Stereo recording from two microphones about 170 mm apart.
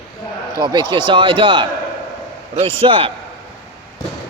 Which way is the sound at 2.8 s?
30° right (ahead or behind).